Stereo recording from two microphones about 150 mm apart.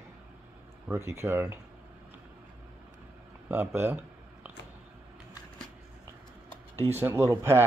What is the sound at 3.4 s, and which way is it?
Speech, 15° right (ahead or behind).